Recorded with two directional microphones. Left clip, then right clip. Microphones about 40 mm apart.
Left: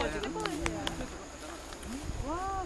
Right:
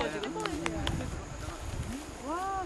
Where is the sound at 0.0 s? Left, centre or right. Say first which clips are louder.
Even; centre.